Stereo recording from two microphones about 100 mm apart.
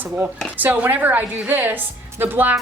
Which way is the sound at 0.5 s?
15° right (ahead or behind).